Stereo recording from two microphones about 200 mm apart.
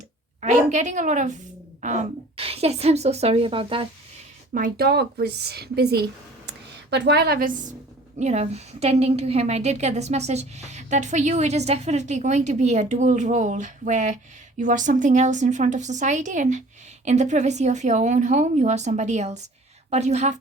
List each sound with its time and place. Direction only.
0.4 s a woman's voice: 35° right (ahead or behind)
4.5 s a woman's voice: 45° right (ahead or behind)
8.2 s a woman's voice: 35° right (ahead or behind)